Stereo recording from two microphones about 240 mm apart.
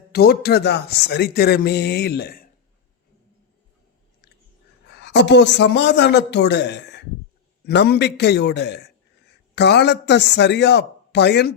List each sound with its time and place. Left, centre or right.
0.1 s speech: left
4.9 s speech: left